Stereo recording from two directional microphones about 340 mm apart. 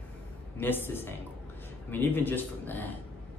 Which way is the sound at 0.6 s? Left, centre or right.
Centre.